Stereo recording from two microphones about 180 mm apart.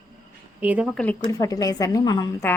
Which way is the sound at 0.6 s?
10° right (ahead or behind).